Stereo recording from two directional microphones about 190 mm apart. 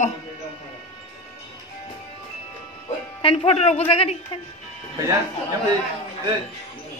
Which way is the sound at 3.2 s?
30° left (ahead or behind).